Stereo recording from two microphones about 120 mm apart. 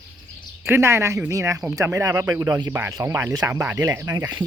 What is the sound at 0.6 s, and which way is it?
Speech, 20° right (ahead or behind).